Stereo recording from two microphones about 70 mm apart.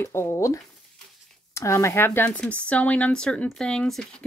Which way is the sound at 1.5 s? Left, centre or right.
Left.